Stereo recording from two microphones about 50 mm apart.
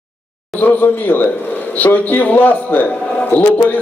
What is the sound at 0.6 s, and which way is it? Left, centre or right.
A man's voice, left.